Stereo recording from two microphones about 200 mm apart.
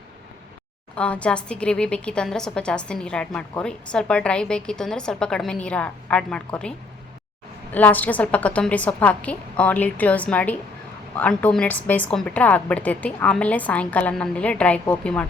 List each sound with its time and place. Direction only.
0.9 s a woman's voice: 5° left (ahead or behind)